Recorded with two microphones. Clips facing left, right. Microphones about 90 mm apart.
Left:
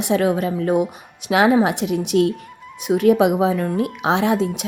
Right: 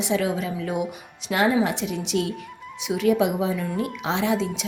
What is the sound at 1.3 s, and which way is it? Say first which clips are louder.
A woman's voice: left 6 dB; 70° left (ahead or behind).